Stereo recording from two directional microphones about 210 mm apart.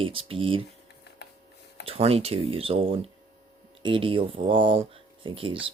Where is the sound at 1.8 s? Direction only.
30° right (ahead or behind).